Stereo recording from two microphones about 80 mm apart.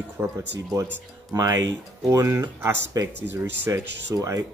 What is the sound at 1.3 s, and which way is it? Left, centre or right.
Speech, right.